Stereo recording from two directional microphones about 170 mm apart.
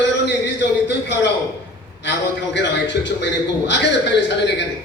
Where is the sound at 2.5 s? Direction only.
90° left.